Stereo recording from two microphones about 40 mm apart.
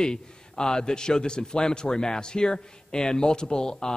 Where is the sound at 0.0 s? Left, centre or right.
Centre.